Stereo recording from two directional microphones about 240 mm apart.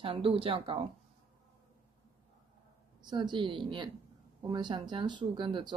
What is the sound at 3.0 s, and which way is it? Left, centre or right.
Speech, centre.